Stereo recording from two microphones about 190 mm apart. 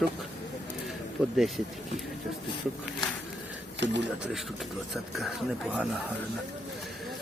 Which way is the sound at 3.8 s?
70° right (ahead or behind).